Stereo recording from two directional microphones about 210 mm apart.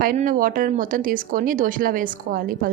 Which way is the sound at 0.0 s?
40° right (ahead or behind).